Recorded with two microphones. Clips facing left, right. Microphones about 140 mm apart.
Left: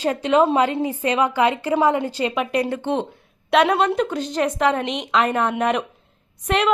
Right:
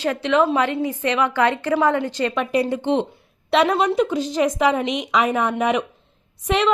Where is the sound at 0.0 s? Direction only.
35° left (ahead or behind).